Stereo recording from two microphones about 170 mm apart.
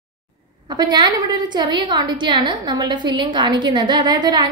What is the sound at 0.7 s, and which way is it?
A woman's voice, 25° right (ahead or behind).